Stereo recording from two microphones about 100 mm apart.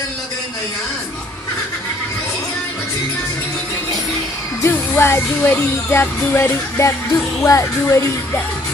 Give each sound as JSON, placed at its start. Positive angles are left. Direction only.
{"t": 4.6, "sound": "music", "side_deg": 25}